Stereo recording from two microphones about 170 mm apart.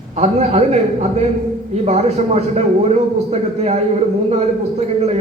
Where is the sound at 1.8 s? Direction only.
40° right (ahead or behind).